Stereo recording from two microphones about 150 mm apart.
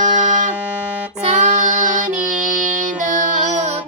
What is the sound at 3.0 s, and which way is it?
Music, 55° right (ahead or behind).